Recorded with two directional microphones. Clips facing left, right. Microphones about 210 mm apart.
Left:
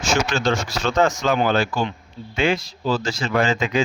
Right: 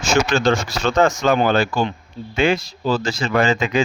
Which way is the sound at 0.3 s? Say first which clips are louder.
Right 4 dB; 70° right (ahead or behind).